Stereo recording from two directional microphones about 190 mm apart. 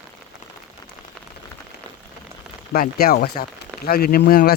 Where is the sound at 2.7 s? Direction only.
50° left (ahead or behind).